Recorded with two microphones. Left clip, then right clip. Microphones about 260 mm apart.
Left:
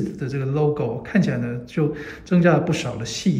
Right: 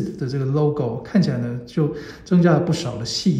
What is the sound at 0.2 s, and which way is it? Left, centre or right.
A man's voice, centre.